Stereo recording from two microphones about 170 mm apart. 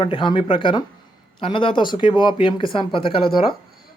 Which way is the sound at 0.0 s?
30° left (ahead or behind).